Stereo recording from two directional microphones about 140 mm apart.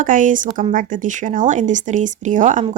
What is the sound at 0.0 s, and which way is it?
Speech, 70° right (ahead or behind).